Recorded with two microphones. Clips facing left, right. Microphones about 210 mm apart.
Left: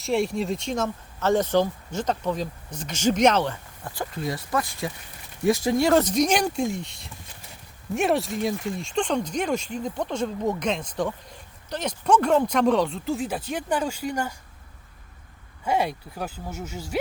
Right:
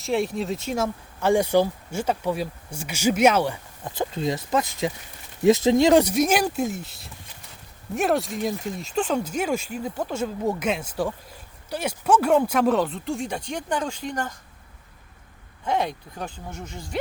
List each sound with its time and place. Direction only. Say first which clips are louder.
0.0 s speech: even; centre (ahead or behind)
15.6 s speech: left 1 dB; 10° left (ahead or behind)